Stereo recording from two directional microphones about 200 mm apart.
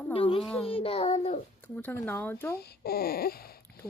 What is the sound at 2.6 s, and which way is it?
Child singing, 50° left (ahead or behind).